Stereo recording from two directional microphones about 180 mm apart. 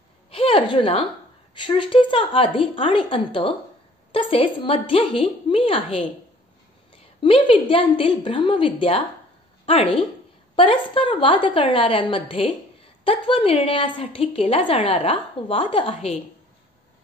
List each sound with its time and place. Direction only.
0.3 s a sound: 30° left (ahead or behind)
1.5 s a woman's voice: 30° left (ahead or behind)
7.2 s a woman's voice: 30° left (ahead or behind)